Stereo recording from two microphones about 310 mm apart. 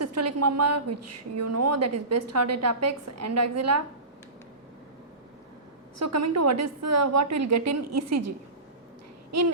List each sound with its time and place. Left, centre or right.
0.0 s a woman's voice: right
6.0 s a woman's voice: right